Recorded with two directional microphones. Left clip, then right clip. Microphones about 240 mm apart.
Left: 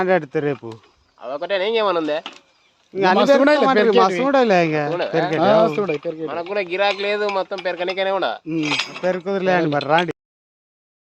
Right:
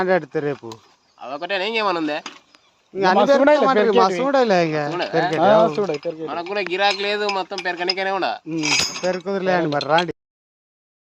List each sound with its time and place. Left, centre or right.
0.0 s speech: left
1.2 s speech: right
2.9 s speech: left
3.4 s a man's voice: left
4.3 s speech: left
4.9 s speech: right
5.4 s speech: left
6.2 s speech: right
9.0 s speech: left